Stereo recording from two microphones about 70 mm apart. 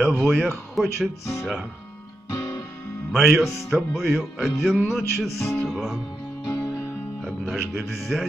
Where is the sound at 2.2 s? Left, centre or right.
Left.